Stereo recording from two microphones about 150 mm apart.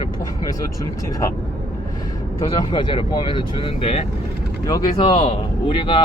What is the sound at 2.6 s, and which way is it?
Speech, 30° left (ahead or behind).